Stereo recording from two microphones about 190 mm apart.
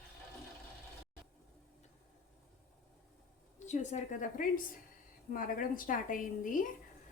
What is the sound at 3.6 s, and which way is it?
A woman's voice, 40° left (ahead or behind).